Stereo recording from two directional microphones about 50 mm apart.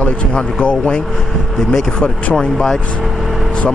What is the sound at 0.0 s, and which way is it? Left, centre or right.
Speech, left.